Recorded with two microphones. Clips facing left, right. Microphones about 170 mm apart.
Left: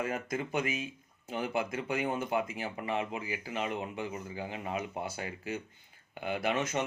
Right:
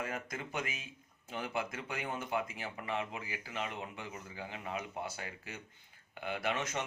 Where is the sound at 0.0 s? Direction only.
20° left (ahead or behind).